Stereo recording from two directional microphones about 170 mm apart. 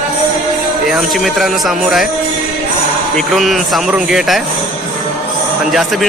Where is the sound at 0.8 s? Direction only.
Centre (ahead or behind).